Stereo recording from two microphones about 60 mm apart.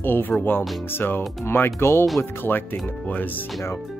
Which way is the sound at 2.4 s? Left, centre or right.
Left.